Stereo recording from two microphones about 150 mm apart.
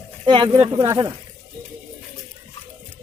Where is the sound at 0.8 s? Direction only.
25° right (ahead or behind).